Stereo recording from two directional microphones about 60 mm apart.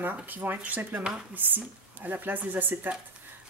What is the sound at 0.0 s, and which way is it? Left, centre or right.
Speech, right.